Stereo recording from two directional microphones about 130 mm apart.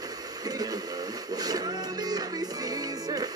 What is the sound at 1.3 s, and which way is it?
Music, 30° right (ahead or behind).